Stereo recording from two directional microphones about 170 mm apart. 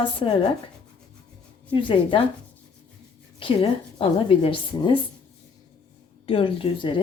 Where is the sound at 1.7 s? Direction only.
30° left (ahead or behind).